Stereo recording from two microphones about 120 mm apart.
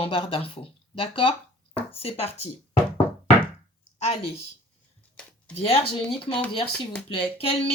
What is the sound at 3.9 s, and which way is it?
Speech, 65° left (ahead or behind).